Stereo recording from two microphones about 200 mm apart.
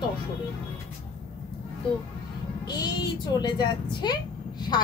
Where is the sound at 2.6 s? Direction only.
20° left (ahead or behind).